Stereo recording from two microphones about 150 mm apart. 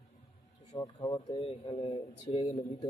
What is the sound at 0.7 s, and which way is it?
Speech, 30° left (ahead or behind).